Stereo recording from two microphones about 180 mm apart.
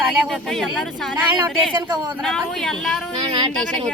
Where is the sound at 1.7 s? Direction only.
25° right (ahead or behind).